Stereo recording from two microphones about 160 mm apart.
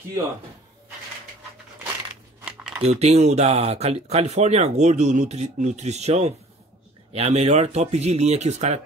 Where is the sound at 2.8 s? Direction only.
40° right (ahead or behind).